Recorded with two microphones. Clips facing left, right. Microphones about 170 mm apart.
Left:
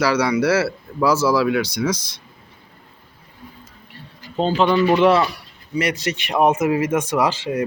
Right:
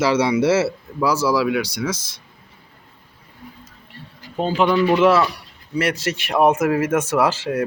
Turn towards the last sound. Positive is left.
turn(degrees=-5)  # may be behind; listen again after turning